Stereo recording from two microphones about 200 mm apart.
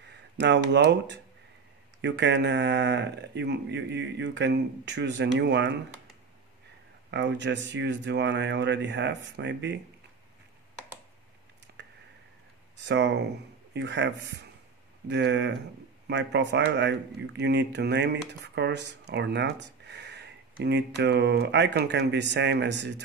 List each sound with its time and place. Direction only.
0.1 s speech: 60° right (ahead or behind)
7.1 s speech: 60° right (ahead or behind)
12.7 s speech: 60° right (ahead or behind)